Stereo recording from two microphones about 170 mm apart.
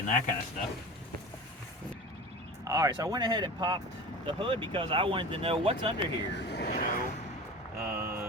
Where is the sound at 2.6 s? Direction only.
20° right (ahead or behind).